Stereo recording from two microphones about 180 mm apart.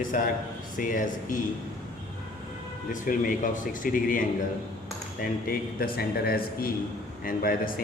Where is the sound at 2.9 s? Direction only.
45° left (ahead or behind).